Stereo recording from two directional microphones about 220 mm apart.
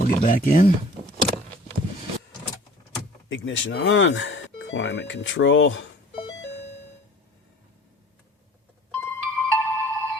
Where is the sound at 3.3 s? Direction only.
55° left (ahead or behind).